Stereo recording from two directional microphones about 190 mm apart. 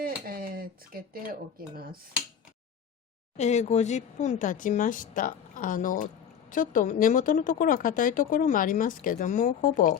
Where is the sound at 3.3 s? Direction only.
35° left (ahead or behind).